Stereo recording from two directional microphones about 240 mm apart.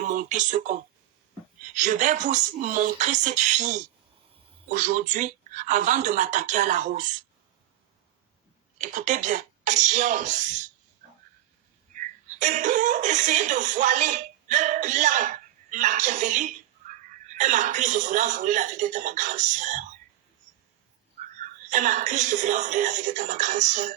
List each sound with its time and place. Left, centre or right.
0.0 s speech: right
8.8 s speech: right
11.9 s speech: right
21.4 s speech: right